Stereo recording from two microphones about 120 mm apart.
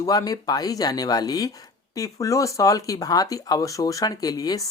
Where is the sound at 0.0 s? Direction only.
30° left (ahead or behind).